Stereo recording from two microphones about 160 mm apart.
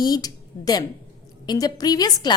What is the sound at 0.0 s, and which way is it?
A woman's voice, 25° left (ahead or behind).